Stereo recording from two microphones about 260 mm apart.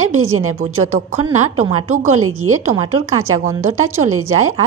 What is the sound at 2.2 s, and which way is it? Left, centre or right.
Speech, right.